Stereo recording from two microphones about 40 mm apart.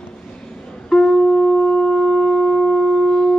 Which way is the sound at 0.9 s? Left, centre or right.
Centre.